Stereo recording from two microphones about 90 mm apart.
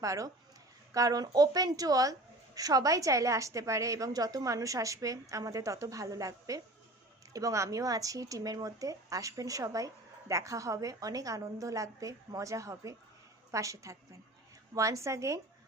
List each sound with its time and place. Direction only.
0.0 s speech: 40° right (ahead or behind)